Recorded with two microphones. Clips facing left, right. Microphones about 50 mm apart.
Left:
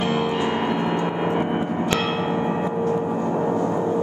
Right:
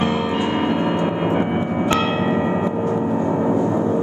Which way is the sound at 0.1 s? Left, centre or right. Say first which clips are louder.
Right 2 dB; centre.